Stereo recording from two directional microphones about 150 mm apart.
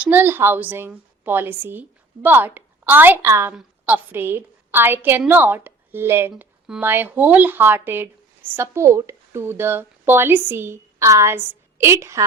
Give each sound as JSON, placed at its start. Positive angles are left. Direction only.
{"t": 0.0, "sound": "a woman's voice", "side_deg": -10}